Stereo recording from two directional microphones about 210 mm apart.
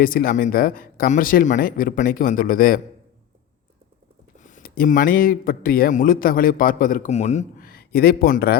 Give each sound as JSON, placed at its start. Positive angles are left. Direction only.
{"t": 0.0, "sound": "speech", "side_deg": 40}
{"t": 4.4, "sound": "speech", "side_deg": 35}